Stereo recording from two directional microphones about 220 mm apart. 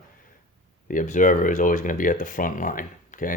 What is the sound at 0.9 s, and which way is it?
Speech, 35° left (ahead or behind).